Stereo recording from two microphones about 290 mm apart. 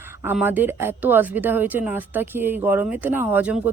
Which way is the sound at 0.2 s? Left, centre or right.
Centre.